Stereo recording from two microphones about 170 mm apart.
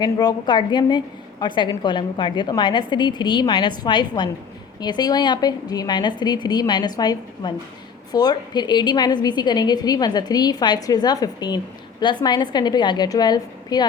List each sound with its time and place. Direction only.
0.0 s a woman's voice: 25° left (ahead or behind)